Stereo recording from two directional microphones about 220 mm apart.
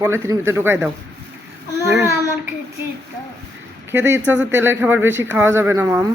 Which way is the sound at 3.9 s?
10° right (ahead or behind).